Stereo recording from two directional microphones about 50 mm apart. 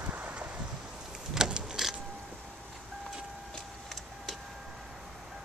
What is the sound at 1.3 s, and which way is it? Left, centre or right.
Power windows, centre.